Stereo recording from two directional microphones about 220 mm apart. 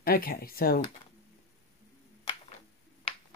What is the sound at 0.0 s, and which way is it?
Speech, 40° left (ahead or behind).